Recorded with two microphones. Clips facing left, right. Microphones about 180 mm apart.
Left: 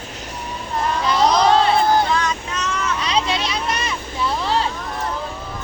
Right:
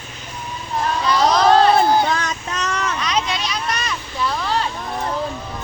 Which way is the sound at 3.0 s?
30° left (ahead or behind).